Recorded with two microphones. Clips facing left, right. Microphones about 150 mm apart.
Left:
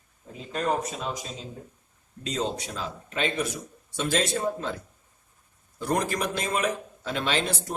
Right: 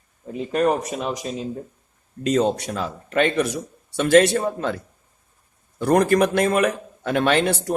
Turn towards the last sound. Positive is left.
turn(degrees=-65)  # may be behind; listen again after turning